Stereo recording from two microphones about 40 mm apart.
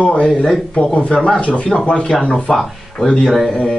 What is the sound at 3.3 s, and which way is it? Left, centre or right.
Speech, centre.